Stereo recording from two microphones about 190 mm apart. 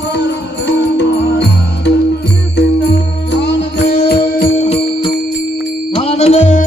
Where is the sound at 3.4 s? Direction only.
60° left (ahead or behind).